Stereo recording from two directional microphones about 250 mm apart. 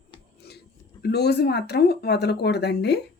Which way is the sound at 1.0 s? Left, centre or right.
Left.